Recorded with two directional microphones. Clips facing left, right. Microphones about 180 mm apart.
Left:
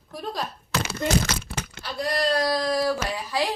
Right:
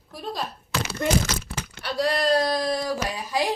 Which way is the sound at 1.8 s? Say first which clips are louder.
Right 3 dB; 70° right (ahead or behind).